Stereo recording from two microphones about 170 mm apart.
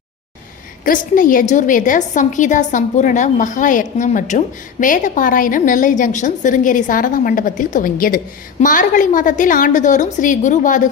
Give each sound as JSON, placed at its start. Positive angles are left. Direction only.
{"t": 0.9, "sound": "a woman's voice", "side_deg": 55}